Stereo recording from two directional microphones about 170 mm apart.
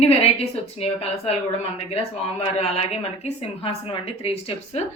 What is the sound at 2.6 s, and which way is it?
Speech, 40° left (ahead or behind).